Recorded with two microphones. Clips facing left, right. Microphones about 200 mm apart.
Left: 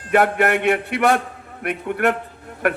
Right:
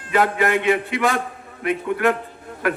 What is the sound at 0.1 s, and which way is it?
A man's voice, 65° left (ahead or behind).